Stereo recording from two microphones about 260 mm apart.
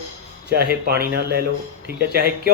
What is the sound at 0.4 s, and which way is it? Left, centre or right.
Speech, right.